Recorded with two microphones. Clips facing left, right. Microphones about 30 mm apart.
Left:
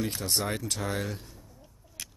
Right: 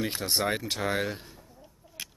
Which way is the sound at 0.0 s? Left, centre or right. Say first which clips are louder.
Right 2 dB; right.